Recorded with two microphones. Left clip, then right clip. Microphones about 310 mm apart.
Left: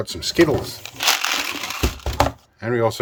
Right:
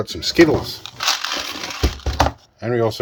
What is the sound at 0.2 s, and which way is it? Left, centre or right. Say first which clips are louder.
Speech: right 3 dB; centre.